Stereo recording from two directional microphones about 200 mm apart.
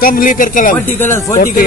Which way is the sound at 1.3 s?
40° left (ahead or behind).